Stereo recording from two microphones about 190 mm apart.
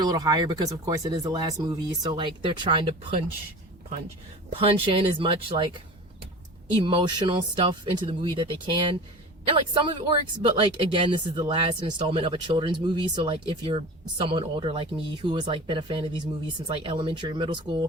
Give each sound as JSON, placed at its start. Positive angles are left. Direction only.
{"t": 0.0, "sound": "speech", "side_deg": -20}
{"t": 4.4, "sound": "speech", "side_deg": -30}
{"t": 6.8, "sound": "speech", "side_deg": -25}